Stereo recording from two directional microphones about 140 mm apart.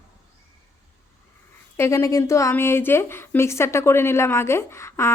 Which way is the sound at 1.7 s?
20° left (ahead or behind).